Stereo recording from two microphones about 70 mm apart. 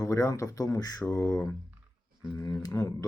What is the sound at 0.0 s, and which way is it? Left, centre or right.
Speech, left.